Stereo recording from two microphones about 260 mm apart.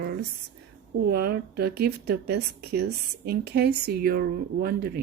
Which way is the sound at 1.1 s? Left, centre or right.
Right.